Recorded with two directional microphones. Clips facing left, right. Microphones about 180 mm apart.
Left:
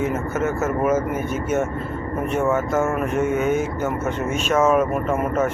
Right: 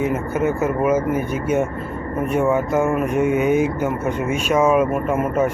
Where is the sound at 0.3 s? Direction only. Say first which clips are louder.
Right 3 dB; 15° right (ahead or behind).